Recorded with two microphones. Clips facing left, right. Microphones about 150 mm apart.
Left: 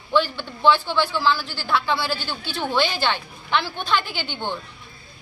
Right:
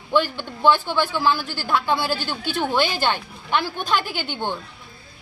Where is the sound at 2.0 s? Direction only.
45° right (ahead or behind).